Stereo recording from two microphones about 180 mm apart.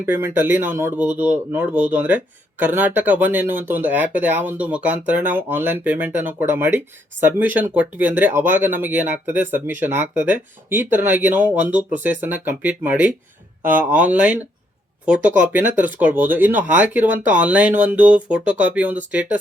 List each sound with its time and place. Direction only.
0.0 s speech: 10° right (ahead or behind)